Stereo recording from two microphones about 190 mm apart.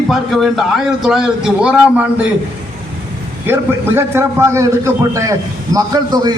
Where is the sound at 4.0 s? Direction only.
15° right (ahead or behind).